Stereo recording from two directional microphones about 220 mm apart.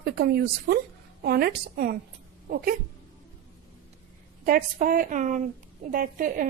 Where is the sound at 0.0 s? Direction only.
45° right (ahead or behind).